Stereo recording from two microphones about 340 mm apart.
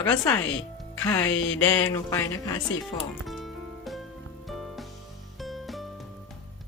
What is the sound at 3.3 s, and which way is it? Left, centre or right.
Music, centre.